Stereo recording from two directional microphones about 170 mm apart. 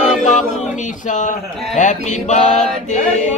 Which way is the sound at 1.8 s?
45° left (ahead or behind).